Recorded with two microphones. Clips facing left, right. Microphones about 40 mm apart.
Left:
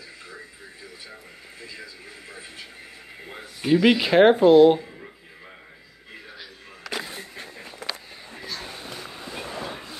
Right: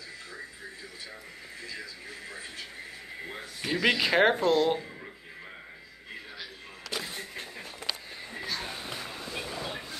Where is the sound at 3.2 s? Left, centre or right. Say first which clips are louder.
Left 7 dB; centre.